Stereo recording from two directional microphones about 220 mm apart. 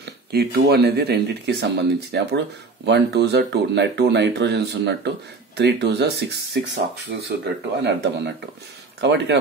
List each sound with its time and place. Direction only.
0.0 s speech: 45° right (ahead or behind)
7.8 s speech: 50° right (ahead or behind)